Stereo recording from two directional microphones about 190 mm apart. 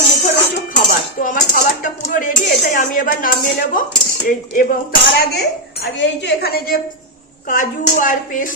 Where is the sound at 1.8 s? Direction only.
45° left (ahead or behind).